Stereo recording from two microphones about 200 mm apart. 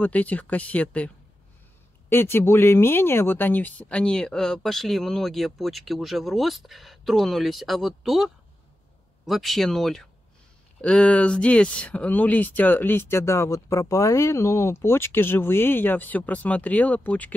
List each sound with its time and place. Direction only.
0.0 s speech: 5° left (ahead or behind)